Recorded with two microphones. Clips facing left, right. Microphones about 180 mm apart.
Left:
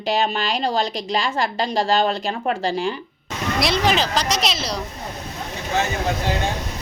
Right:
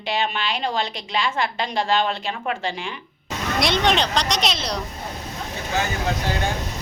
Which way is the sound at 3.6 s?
Centre (ahead or behind).